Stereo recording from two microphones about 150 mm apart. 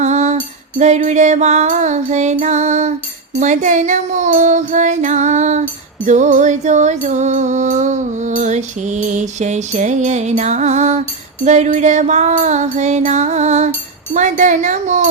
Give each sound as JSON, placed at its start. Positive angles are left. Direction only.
{"t": 0.0, "sound": "music", "side_deg": -50}